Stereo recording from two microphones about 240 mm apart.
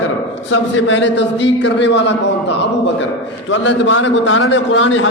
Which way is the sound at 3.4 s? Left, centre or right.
Left.